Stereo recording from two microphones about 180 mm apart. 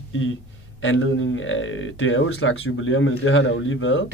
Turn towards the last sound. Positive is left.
turn(degrees=90)